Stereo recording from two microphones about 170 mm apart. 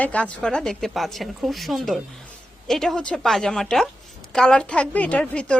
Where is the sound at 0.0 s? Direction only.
5° left (ahead or behind).